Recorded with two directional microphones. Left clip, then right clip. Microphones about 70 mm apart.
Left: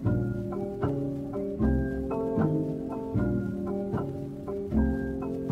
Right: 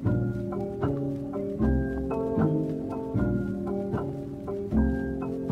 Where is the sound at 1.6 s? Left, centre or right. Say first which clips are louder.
Right 1 dB; centre.